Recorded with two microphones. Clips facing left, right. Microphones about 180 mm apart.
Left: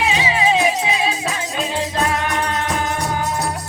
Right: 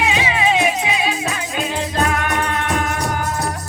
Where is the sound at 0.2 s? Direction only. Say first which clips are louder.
Even; 30° left (ahead or behind).